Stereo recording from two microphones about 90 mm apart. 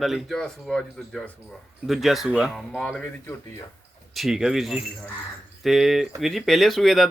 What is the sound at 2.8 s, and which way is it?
Speech, 10° left (ahead or behind).